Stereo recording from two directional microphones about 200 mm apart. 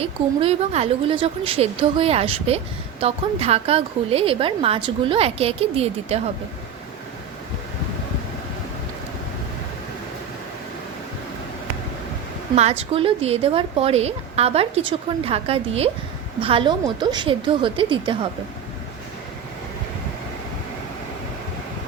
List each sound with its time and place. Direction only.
0.0 s a woman's voice: 30° right (ahead or behind)
12.5 s a woman's voice: 30° right (ahead or behind)